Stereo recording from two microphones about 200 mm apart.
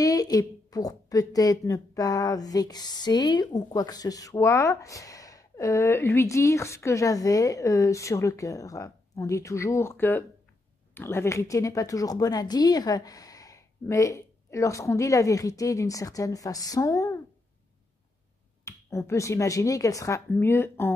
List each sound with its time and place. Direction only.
0.0 s a woman's voice: 20° left (ahead or behind)
18.6 s a woman's voice: 15° left (ahead or behind)